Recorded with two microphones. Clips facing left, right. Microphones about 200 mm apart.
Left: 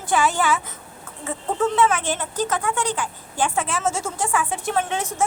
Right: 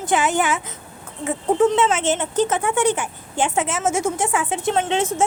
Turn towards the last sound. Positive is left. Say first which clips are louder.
# right 4 dB
turn(degrees=-25)  # may be behind; listen again after turning